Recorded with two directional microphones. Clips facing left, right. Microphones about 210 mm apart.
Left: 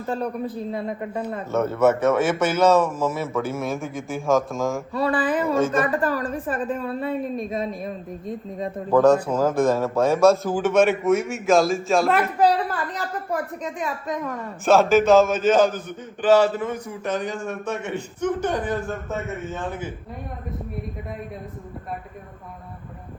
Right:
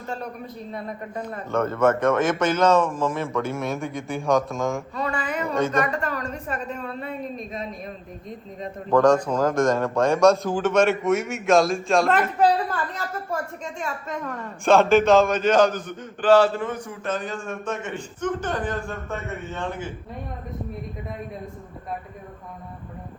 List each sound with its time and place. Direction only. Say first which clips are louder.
0.1 s a man's voice: left 7 dB; 30° left (ahead or behind)
1.1 s a man's voice: left 1 dB; 10° left (ahead or behind)
4.9 s a man's voice: left 5 dB; 35° left (ahead or behind)
5.5 s a man's voice: right 1 dB; centre (ahead or behind)
7.2 s a man's voice: left 5 dB; centre (ahead or behind)
8.9 s a man's voice: left 1 dB; 5° left (ahead or behind)
13.8 s a man's voice: left 2 dB; 15° left (ahead or behind)
14.6 s a man's voice: even; centre (ahead or behind)